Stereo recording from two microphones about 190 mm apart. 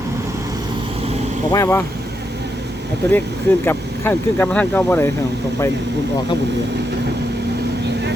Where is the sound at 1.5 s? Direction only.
15° left (ahead or behind).